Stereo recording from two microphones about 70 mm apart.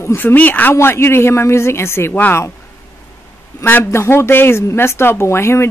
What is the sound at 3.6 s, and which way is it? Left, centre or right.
Speech, left.